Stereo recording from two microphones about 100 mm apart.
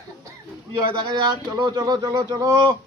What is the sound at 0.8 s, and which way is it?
Speech, 50° right (ahead or behind).